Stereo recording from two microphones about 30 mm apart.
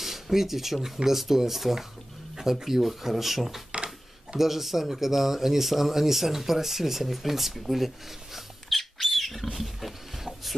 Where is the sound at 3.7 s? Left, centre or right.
Right.